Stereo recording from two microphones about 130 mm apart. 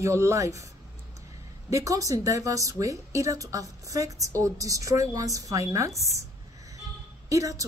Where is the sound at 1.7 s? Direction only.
25° right (ahead or behind).